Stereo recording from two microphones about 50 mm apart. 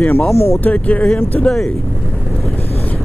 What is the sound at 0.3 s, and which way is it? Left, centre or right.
Speech, left.